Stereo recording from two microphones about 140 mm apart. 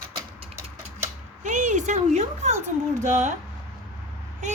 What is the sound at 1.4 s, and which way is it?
A woman's voice, 60° right (ahead or behind).